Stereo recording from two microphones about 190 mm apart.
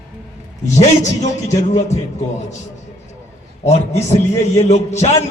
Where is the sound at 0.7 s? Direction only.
40° left (ahead or behind).